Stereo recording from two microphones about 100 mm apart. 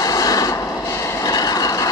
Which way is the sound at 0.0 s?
35° left (ahead or behind).